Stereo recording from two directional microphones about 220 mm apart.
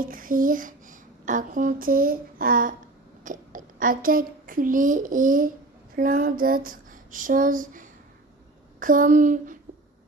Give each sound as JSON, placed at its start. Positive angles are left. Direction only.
{"t": 0.0, "sound": "a child's voice", "side_deg": -40}
{"t": 5.9, "sound": "a sound", "side_deg": -40}
{"t": 8.7, "sound": "speech", "side_deg": -40}